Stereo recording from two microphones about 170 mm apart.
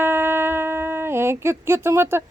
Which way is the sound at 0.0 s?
15° right (ahead or behind).